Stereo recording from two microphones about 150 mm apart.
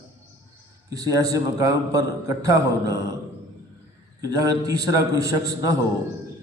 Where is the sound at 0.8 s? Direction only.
25° right (ahead or behind).